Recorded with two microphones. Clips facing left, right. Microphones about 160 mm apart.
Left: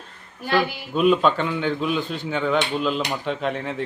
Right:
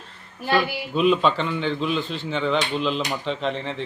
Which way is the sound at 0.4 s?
Centre (ahead or behind).